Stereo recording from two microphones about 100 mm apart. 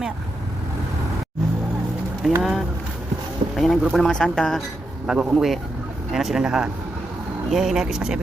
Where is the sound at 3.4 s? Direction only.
60° right (ahead or behind).